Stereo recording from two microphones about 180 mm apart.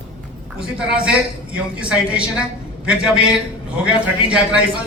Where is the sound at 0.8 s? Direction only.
5° right (ahead or behind).